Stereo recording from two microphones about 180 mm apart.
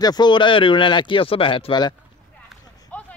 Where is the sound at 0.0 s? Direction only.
25° left (ahead or behind).